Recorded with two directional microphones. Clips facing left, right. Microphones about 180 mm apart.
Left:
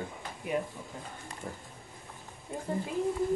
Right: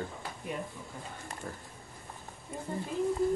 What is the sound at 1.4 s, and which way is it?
Speech, 15° left (ahead or behind).